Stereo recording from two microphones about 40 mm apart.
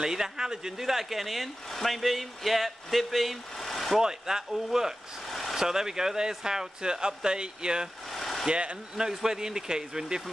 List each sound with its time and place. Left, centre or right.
0.0 s speech: centre
4.0 s speech: centre
5.3 s vehicle: centre
5.6 s speech: centre
8.1 s vehicle: centre
8.5 s speech: right
8.9 s speech: centre